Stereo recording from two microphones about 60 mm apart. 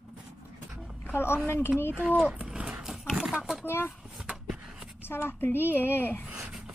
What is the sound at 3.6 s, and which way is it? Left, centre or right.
Speech, left.